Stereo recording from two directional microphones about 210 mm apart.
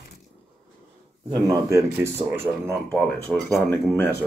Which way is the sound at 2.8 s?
5° left (ahead or behind).